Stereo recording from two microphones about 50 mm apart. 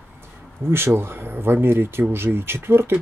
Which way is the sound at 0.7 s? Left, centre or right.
Right.